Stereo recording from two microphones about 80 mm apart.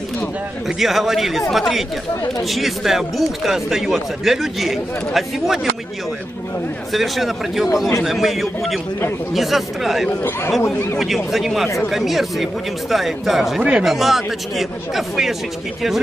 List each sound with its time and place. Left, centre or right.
0.7 s speech: centre
6.9 s speech: centre
10.6 s speech: left
11.3 s speech: centre